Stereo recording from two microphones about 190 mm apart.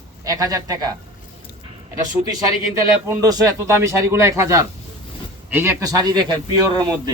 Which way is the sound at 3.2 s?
20° right (ahead or behind).